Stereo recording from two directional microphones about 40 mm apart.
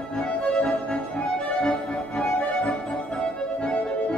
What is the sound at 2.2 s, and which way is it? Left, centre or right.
Music, left.